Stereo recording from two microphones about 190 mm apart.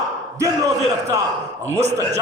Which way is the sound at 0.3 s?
15° right (ahead or behind).